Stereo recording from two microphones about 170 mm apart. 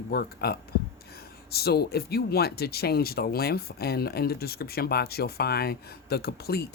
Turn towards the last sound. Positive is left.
turn(degrees=65)  # may be behind; listen again after turning